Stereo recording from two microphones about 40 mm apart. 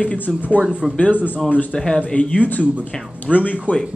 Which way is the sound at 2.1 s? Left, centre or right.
Left.